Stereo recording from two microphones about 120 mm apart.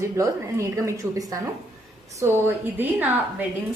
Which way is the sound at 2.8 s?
15° right (ahead or behind).